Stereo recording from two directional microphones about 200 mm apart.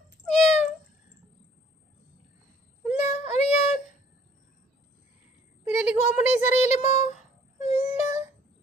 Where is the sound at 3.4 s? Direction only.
35° left (ahead or behind).